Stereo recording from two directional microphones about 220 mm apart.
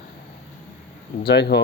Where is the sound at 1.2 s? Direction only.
50° left (ahead or behind).